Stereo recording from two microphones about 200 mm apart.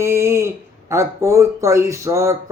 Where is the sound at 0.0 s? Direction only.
15° right (ahead or behind).